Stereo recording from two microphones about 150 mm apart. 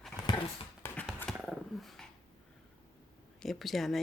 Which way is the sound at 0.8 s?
15° left (ahead or behind).